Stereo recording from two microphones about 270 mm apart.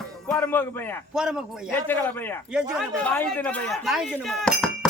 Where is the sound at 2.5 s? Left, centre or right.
Centre.